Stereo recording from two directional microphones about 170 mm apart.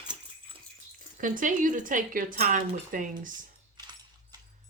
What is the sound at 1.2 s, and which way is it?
Speech, 50° right (ahead or behind).